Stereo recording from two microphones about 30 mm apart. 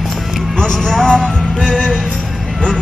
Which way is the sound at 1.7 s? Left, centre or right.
Left.